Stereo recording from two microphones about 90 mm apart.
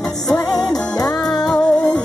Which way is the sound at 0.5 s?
45° left (ahead or behind).